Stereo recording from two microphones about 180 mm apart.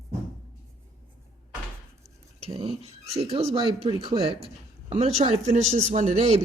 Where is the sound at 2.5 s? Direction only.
30° right (ahead or behind).